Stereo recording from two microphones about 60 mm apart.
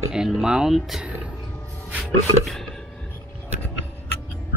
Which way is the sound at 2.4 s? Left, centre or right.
Centre.